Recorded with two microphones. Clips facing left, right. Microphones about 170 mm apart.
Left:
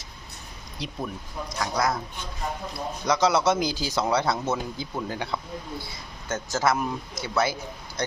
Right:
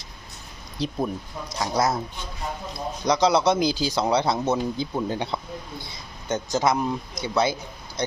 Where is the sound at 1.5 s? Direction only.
25° right (ahead or behind).